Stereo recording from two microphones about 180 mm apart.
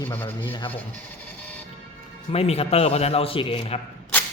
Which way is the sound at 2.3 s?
35° left (ahead or behind).